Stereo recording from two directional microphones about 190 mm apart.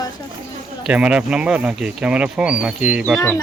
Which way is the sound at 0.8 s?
5° right (ahead or behind).